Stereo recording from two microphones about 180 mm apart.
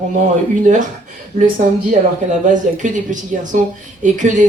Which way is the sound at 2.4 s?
45° right (ahead or behind).